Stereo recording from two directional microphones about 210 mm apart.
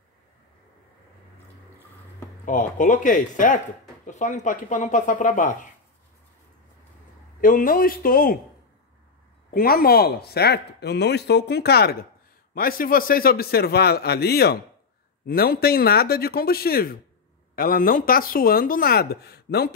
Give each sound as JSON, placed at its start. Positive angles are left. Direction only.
{"t": 2.4, "sound": "speech", "side_deg": 40}
{"t": 7.3, "sound": "speech", "side_deg": 40}
{"t": 9.5, "sound": "speech", "side_deg": 45}